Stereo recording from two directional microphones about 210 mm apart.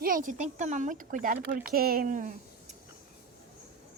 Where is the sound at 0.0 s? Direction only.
40° right (ahead or behind).